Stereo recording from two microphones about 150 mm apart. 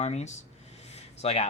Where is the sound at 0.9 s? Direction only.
45° left (ahead or behind).